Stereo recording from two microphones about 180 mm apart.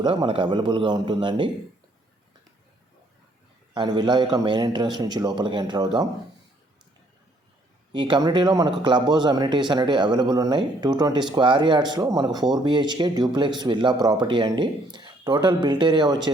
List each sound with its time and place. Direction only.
0.0 s speech: 25° right (ahead or behind)
3.8 s speech: 25° right (ahead or behind)
7.9 s speech: 25° right (ahead or behind)